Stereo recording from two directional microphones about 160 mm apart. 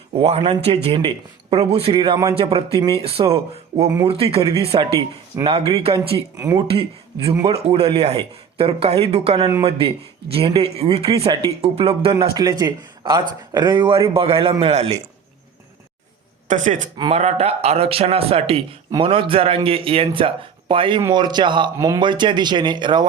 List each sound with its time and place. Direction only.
0.2 s speech: 35° right (ahead or behind)
6.3 s speech: 20° right (ahead or behind)
6.7 s speech: 35° right (ahead or behind)
12.3 s speech: 25° right (ahead or behind); by 14.9 s 40° right (ahead or behind)
16.5 s speech: 50° right (ahead or behind)
17.1 s speech: 40° right (ahead or behind)